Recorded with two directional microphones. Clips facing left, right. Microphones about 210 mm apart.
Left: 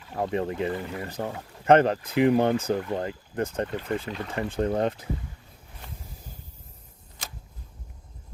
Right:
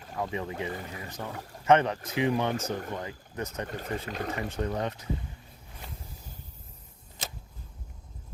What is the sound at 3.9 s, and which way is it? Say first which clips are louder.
Speech: left 2 dB; 45° right (ahead or behind).